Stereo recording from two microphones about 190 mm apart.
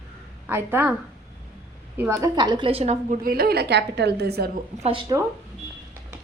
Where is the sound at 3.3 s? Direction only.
55° right (ahead or behind).